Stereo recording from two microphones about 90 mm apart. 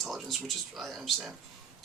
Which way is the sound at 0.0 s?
Centre (ahead or behind).